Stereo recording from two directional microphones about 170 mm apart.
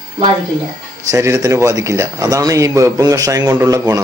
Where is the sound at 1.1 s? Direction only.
15° right (ahead or behind).